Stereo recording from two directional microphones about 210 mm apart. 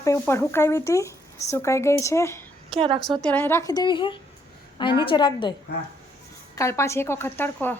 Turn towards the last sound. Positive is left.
turn(degrees=10)  # may be behind; listen again after turning